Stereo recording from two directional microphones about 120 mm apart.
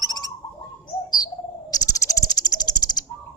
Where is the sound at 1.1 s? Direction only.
35° left (ahead or behind).